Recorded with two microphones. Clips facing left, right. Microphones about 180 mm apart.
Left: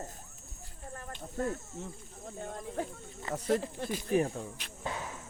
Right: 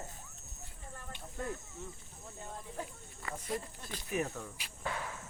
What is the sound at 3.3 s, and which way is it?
Speech, 80° left.